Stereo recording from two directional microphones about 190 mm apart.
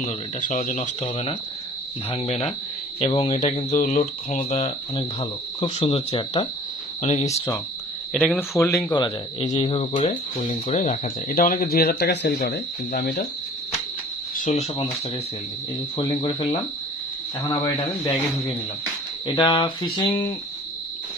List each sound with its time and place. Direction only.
0.0 s speech: 40° left (ahead or behind)
8.1 s speech: centre (ahead or behind)
8.6 s speech: 15° left (ahead or behind)
9.4 s speech: 35° left (ahead or behind); by 13.3 s 50° left (ahead or behind)
14.3 s speech: 40° left (ahead or behind)
16.0 s speech: 25° left (ahead or behind)
19.2 s speech: 25° left (ahead or behind)